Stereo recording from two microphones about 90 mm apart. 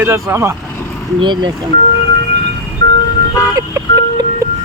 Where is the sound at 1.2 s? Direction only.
55° right (ahead or behind).